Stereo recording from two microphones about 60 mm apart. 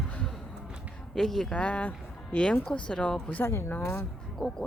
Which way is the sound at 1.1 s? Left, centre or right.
Centre.